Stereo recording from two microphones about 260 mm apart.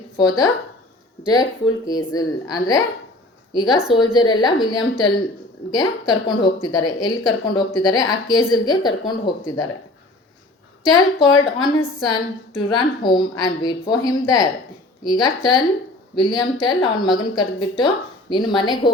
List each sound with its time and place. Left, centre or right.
1.9 s a woman's voice: centre
10.8 s speech: centre